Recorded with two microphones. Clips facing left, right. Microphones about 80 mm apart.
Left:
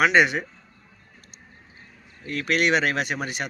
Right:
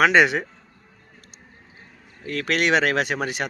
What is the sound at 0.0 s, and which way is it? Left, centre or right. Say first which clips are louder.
Speech: right 2 dB; right.